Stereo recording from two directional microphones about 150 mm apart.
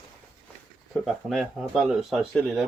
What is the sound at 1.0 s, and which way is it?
Speech, centre (ahead or behind).